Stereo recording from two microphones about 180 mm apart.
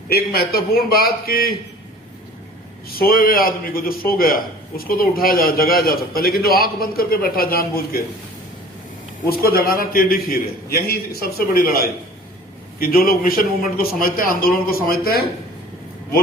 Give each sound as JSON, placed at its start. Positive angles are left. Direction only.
{"t": 0.1, "sound": "a man's voice", "side_deg": 60}
{"t": 3.0, "sound": "a man's voice", "side_deg": 55}
{"t": 9.3, "sound": "a man's voice", "side_deg": 55}